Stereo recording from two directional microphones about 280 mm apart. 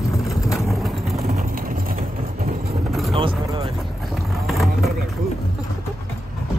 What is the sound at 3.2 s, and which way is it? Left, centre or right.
Vehicle, centre.